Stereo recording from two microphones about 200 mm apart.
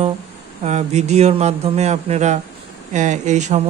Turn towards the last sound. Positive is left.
turn(degrees=-35)  # may be behind; listen again after turning